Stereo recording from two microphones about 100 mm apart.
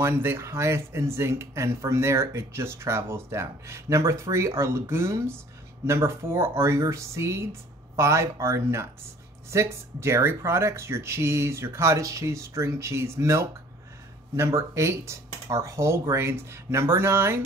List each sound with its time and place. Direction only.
0.0 s speech: 25° right (ahead or behind)